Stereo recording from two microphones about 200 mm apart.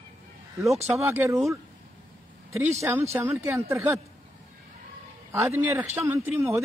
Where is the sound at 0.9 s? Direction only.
15° right (ahead or behind).